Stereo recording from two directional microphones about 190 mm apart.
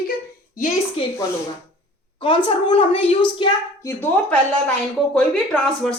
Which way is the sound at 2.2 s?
25° left (ahead or behind).